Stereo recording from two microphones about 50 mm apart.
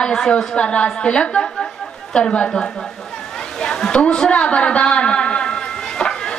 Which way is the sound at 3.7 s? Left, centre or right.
Centre.